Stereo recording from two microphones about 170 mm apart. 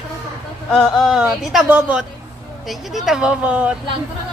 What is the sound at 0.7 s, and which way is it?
Speech, centre (ahead or behind).